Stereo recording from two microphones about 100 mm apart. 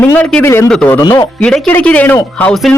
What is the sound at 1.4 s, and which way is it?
Speech, 10° left (ahead or behind).